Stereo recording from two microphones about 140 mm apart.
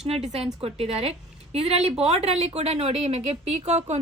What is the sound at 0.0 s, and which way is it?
A woman's voice, 50° right (ahead or behind).